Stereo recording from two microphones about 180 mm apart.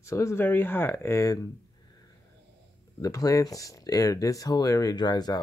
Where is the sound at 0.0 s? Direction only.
15° left (ahead or behind).